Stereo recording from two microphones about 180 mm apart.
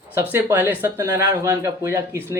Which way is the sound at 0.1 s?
10° right (ahead or behind).